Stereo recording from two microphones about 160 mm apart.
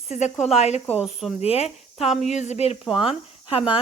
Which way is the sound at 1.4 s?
40° left (ahead or behind).